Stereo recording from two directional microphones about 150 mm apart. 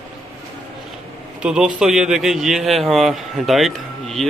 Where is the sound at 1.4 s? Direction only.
5° right (ahead or behind).